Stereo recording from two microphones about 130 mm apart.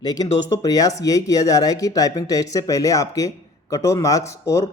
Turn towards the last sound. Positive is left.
turn(degrees=25)  # may be behind; listen again after turning